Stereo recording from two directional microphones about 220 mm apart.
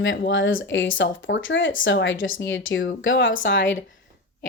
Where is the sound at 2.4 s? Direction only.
60° left (ahead or behind).